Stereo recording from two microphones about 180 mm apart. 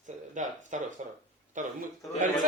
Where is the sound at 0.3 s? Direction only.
45° right (ahead or behind).